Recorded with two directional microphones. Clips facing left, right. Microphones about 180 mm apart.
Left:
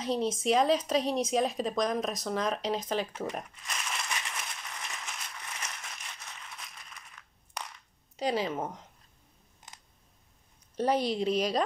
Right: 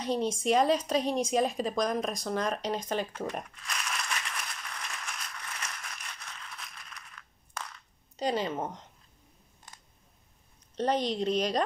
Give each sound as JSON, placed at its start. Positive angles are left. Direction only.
{"t": 0.0, "sound": "speech", "side_deg": 0}
{"t": 3.1, "sound": "speech", "side_deg": 15}
{"t": 3.5, "sound": "a sound", "side_deg": 20}
{"t": 8.2, "sound": "speech", "side_deg": 5}
{"t": 9.7, "sound": "scissors", "side_deg": 20}
{"t": 10.8, "sound": "speech", "side_deg": 5}